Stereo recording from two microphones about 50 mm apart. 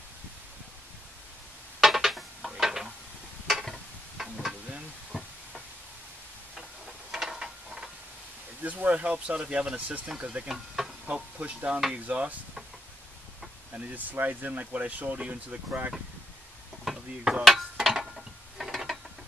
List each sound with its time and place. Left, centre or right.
1.8 s a sound: centre
4.2 s stir: centre
5.1 s a sound: centre
7.1 s mechanisms: centre
8.6 s speech: right
9.8 s speech: right
10.0 s speech: right
13.7 s speech: right
16.8 s a sound: centre
18.1 s mechanisms: centre